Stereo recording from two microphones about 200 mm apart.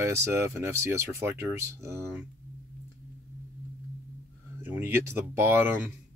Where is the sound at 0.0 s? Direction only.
15° right (ahead or behind).